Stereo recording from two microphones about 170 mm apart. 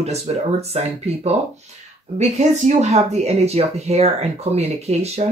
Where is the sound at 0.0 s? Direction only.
40° right (ahead or behind).